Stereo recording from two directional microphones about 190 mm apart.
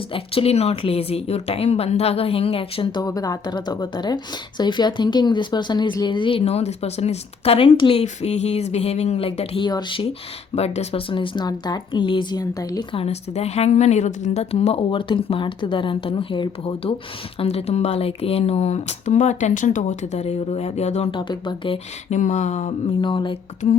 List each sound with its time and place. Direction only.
0.1 s speech: 30° left (ahead or behind)
13.0 s speech: 35° left (ahead or behind)
21.2 s speech: 25° left (ahead or behind)
22.1 s speech: 40° left (ahead or behind)
23.0 s speech: 25° left (ahead or behind)